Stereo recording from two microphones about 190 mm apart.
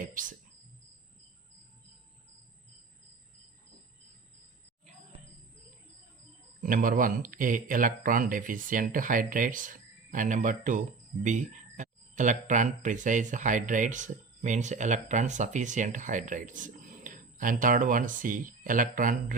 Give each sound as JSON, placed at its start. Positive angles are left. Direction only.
{"t": 0.0, "sound": "cricket", "side_deg": -45}
{"t": 6.6, "sound": "speech", "side_deg": -45}